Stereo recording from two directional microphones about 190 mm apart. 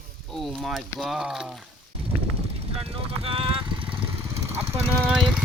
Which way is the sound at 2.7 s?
30° right (ahead or behind).